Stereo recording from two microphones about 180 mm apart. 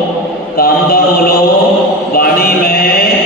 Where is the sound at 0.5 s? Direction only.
55° left (ahead or behind).